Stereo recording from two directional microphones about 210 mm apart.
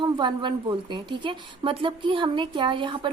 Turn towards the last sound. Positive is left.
turn(degrees=-25)  # may be behind; listen again after turning